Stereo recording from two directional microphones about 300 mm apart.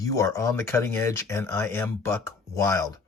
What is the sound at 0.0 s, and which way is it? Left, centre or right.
Speech, centre.